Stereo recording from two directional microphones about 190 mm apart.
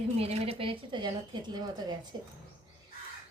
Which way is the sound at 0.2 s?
30° right (ahead or behind).